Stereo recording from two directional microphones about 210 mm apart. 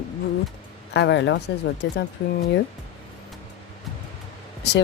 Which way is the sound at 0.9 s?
55° left (ahead or behind).